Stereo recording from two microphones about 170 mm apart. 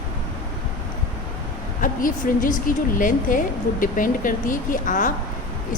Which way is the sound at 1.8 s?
55° left (ahead or behind).